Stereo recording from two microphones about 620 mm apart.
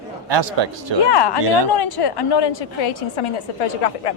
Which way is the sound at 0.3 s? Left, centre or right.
Right.